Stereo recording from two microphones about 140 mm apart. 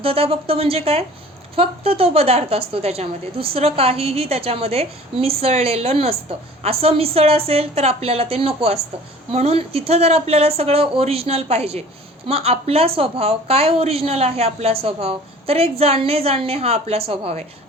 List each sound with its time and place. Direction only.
0.0 s a woman's voice: 45° right (ahead or behind)